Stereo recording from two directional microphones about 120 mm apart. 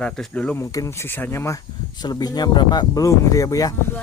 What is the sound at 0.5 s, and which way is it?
Speech, 25° left (ahead or behind).